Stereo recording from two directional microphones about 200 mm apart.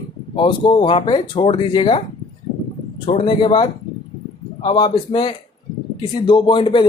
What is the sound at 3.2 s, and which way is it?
Speech, 25° left (ahead or behind).